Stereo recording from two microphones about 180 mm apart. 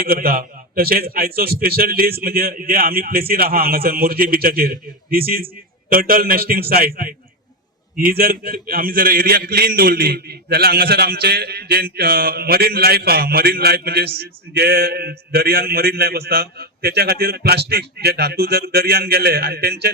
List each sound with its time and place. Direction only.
0.0 s a man's voice: 55° right (ahead or behind)